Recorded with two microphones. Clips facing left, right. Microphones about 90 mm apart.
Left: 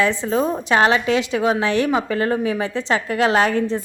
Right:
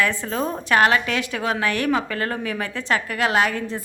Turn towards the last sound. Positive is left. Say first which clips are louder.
# left 4 dB
turn(degrees=35)  # may be behind; listen again after turning